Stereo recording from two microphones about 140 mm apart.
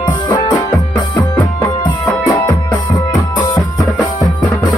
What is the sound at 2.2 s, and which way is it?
Music, 30° left (ahead or behind).